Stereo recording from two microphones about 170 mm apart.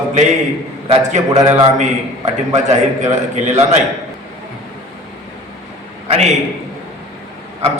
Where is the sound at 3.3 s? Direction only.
45° right (ahead or behind).